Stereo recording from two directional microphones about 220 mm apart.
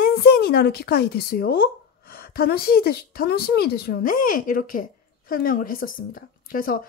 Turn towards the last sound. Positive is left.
turn(degrees=40)  # may be behind; listen again after turning